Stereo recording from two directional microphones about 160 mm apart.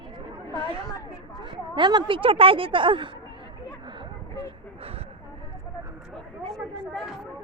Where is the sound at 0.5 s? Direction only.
35° right (ahead or behind).